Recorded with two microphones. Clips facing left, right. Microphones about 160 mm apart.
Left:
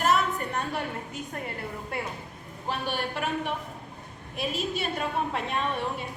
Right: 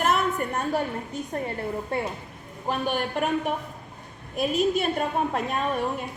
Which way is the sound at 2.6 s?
45° right (ahead or behind).